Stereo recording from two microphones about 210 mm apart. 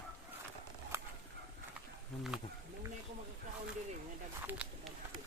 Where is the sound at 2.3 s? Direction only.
5° right (ahead or behind).